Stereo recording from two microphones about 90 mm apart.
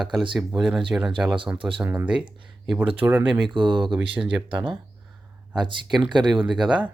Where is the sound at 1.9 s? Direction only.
15° right (ahead or behind).